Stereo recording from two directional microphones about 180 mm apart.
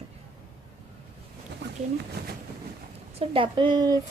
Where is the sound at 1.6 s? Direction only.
65° right (ahead or behind).